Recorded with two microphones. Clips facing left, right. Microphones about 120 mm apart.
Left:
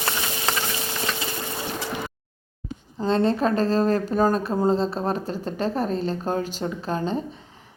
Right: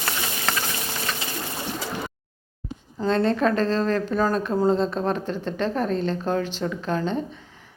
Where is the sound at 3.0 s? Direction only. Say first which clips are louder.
Even; 35° left (ahead or behind).